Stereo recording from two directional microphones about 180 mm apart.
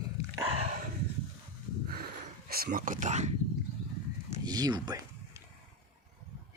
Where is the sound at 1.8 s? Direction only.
55° right (ahead or behind); by 3.3 s 40° right (ahead or behind).